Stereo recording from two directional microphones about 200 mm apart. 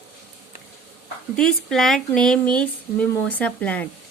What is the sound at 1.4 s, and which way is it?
Speech, centre (ahead or behind).